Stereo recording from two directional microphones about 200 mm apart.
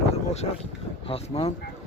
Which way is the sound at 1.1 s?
30° left (ahead or behind).